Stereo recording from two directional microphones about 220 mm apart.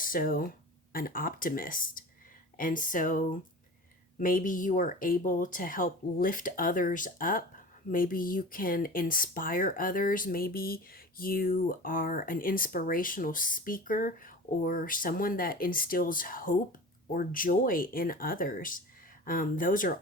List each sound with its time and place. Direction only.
0.0 s speech: 40° left (ahead or behind)